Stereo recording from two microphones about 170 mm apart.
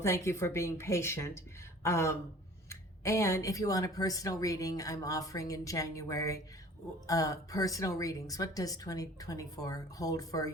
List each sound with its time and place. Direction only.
0.0 s speech: 15° left (ahead or behind)